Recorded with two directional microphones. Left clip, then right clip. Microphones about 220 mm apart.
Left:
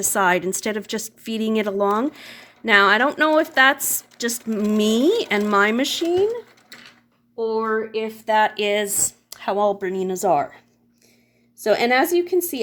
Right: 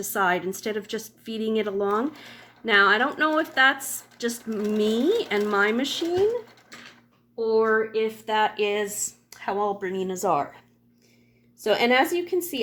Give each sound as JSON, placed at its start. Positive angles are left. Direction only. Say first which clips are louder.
{"t": 0.0, "sound": "a woman's voice", "louder": "left 5 dB", "side_deg": 45}
{"t": 7.3, "sound": "speech", "louder": "right 1 dB", "side_deg": 30}
{"t": 8.3, "sound": "a woman's voice", "louder": "left 7 dB", "side_deg": 45}
{"t": 11.6, "sound": "speech", "louder": "left 3 dB", "side_deg": 40}